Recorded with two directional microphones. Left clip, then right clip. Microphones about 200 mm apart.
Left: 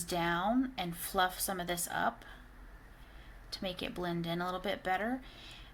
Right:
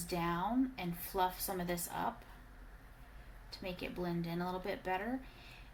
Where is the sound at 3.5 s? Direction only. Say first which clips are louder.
Left 4 dB; 50° left (ahead or behind).